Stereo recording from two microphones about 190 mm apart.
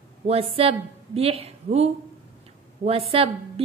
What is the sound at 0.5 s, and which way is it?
A woman's voice, 30° right (ahead or behind).